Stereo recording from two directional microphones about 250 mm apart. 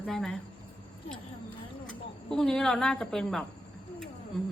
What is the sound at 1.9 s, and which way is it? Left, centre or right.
A woman's voice, centre.